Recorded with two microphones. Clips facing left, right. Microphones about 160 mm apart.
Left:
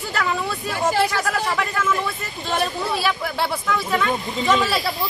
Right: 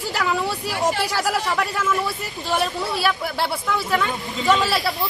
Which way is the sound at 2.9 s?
Centre (ahead or behind).